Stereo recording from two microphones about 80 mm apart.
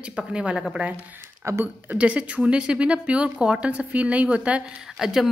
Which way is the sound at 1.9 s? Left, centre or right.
Centre.